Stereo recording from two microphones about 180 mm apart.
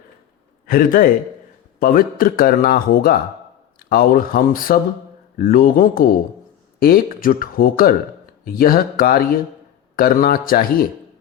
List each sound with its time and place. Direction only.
0.7 s a man's voice: 55° left (ahead or behind)